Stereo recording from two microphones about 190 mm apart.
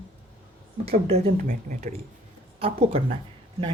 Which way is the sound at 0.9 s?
30° right (ahead or behind).